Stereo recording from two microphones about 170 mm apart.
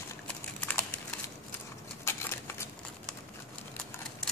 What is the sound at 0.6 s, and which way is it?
Computer keyboard, 10° left (ahead or behind).